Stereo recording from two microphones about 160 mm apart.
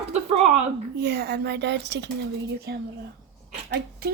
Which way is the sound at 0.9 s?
90° right.